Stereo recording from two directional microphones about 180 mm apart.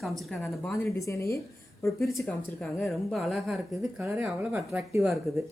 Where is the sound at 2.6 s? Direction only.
Centre (ahead or behind).